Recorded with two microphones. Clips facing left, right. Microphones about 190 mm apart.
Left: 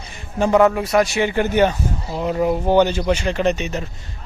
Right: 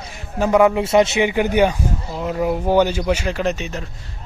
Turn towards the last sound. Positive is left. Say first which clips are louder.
# left 3 dB
turn(degrees=0)  # may be behind; listen again after turning